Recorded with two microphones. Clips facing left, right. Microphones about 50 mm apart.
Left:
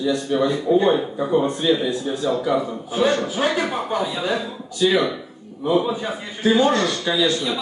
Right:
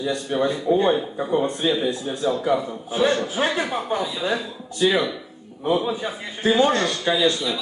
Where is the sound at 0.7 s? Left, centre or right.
Right.